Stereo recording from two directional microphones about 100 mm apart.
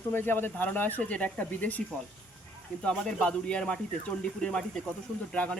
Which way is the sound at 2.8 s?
10° left (ahead or behind).